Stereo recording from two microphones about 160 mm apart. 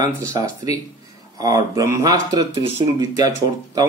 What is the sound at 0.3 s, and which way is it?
Speech, 25° right (ahead or behind).